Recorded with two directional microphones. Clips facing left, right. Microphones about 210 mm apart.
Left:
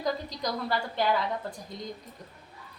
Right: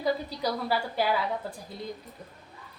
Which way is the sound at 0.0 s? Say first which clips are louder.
Right 3 dB; 10° right (ahead or behind).